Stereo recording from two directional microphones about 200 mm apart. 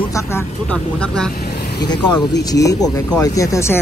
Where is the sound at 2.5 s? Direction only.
15° left (ahead or behind).